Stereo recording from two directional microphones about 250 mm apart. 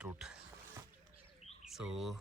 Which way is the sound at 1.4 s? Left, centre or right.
Left.